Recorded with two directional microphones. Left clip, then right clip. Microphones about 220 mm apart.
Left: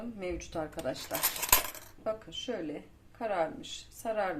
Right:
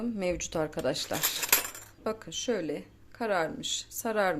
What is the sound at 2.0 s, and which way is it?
Speech, 50° right (ahead or behind).